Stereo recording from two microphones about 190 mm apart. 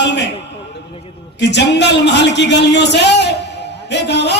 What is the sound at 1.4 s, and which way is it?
A man's voice, 65° left (ahead or behind).